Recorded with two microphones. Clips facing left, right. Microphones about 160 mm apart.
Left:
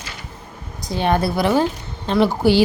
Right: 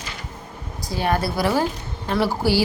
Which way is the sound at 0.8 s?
20° left (ahead or behind).